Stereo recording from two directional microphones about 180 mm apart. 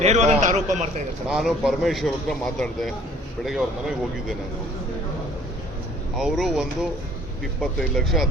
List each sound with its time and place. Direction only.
0.0 s a man's voice: 40° right (ahead or behind)
1.3 s a man's voice: centre (ahead or behind)
6.1 s a man's voice: centre (ahead or behind)